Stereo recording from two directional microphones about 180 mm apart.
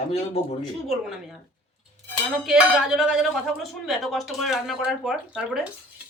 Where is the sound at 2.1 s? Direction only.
Centre (ahead or behind).